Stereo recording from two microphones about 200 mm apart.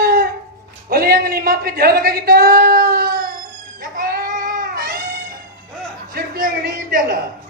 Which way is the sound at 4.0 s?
45° right (ahead or behind).